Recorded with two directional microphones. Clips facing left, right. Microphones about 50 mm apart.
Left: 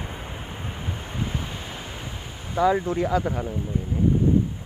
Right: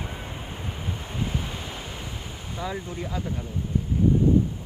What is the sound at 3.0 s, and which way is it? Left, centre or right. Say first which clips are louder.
Speech: left 9 dB; left.